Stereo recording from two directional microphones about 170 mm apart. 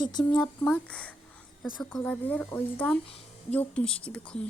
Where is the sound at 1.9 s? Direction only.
5° left (ahead or behind).